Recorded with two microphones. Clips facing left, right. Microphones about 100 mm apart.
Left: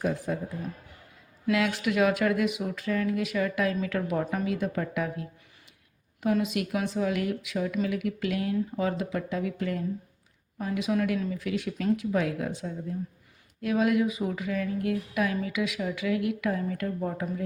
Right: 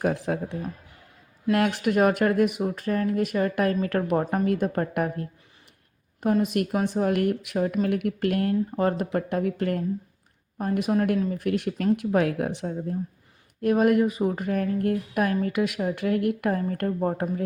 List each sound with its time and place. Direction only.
0.0 s speech: 70° right (ahead or behind)
1.5 s speech: 55° right (ahead or behind)
4.2 s speech: 45° right (ahead or behind)
6.8 s speech: 55° right (ahead or behind)
13.6 s speech: 50° right (ahead or behind)